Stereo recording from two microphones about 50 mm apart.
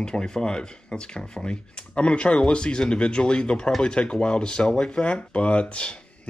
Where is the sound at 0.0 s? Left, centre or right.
Centre.